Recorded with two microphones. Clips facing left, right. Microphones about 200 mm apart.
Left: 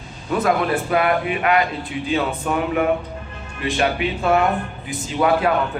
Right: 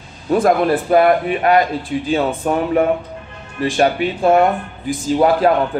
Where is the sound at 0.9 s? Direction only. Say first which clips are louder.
Right 8 dB; 40° right (ahead or behind).